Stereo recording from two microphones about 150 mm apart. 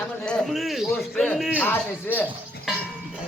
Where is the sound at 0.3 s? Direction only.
5° left (ahead or behind).